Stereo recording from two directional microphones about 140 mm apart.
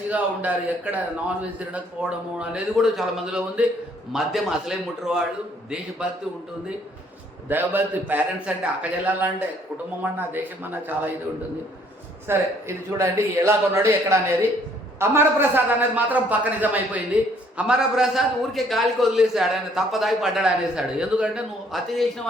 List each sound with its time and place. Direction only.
0.1 s a man's voice: 10° right (ahead or behind)
7.4 s a man's voice: 15° right (ahead or behind)
12.3 s a man's voice: 20° right (ahead or behind); by 22.0 s centre (ahead or behind)